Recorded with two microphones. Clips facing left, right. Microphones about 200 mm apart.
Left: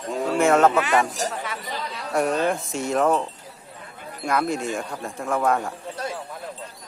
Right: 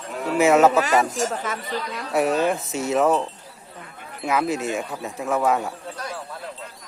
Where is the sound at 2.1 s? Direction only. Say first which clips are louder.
Right 1 dB; 5° right (ahead or behind).